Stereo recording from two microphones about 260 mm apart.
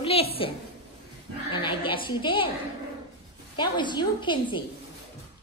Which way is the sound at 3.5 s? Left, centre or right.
Centre.